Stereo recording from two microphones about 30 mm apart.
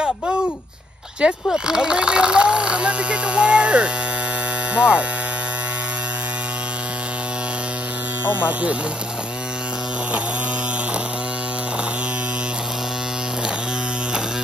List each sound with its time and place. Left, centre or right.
1.2 s speech: right
1.7 s speech: right